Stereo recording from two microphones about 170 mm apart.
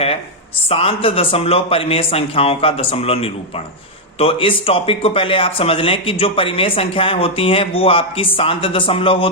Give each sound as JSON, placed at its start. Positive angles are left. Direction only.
{"t": 0.7, "sound": "speech", "side_deg": 35}